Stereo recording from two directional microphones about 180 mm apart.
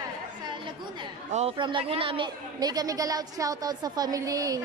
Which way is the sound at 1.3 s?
30° right (ahead or behind).